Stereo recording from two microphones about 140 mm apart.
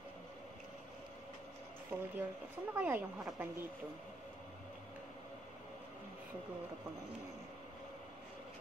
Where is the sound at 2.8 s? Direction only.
10° right (ahead or behind).